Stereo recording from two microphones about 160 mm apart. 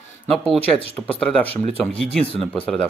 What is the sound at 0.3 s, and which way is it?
Speech, 5° left (ahead or behind).